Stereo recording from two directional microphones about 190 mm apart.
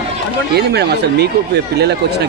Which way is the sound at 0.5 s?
60° right (ahead or behind).